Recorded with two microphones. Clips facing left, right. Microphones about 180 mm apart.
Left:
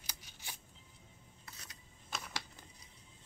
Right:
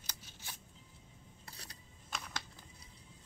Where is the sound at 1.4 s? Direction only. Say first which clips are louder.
Right 2 dB; 35° right (ahead or behind).